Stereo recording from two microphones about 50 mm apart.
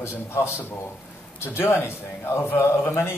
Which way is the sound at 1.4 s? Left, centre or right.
Left.